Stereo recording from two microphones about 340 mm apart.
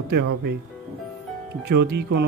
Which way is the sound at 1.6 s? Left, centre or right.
Right.